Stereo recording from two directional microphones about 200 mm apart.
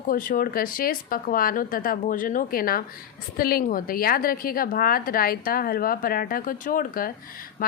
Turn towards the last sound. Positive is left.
turn(degrees=45)  # may be behind; listen again after turning